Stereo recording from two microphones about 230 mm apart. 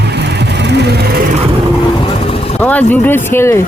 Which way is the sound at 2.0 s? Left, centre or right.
Left.